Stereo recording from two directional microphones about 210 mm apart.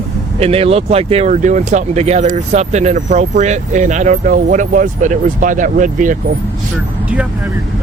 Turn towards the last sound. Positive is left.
turn(degrees=-40)  # may be behind; listen again after turning